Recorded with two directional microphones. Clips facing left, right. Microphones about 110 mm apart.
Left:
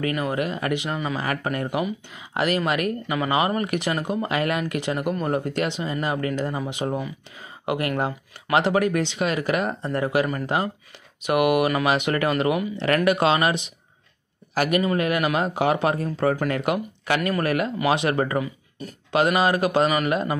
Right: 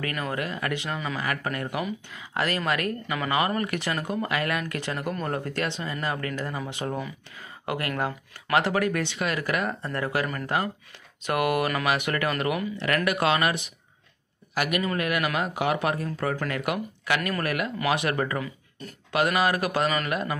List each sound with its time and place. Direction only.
0.0 s speech: 20° left (ahead or behind)
14.5 s a man's voice: 35° left (ahead or behind)
14.8 s speech: 25° left (ahead or behind)